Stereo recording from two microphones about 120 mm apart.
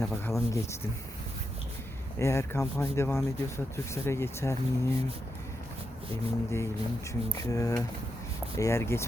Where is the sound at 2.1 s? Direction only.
25° left (ahead or behind).